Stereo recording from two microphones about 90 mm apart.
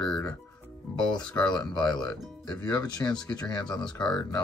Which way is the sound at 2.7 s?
50° left (ahead or behind).